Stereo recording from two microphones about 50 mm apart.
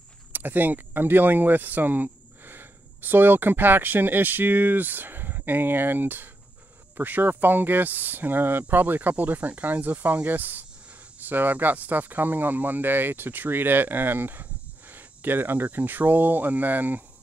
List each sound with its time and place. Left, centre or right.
0.3 s speech: right